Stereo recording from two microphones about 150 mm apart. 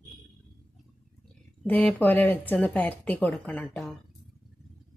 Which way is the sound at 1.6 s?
10° left (ahead or behind).